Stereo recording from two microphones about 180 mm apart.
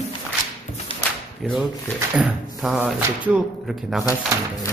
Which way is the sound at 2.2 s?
5° right (ahead or behind).